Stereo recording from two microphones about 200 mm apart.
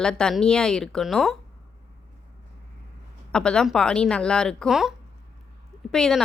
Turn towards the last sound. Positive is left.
turn(degrees=0)  # may be behind; listen again after turning